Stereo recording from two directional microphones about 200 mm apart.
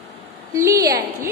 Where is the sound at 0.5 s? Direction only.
15° right (ahead or behind).